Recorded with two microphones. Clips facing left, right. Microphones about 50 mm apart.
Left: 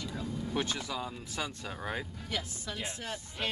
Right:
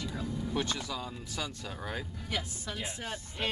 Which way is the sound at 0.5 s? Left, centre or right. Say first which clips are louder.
Left 1 dB; centre.